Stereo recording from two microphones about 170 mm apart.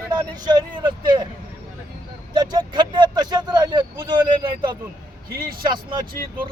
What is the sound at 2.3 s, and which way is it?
Speech, 25° right (ahead or behind).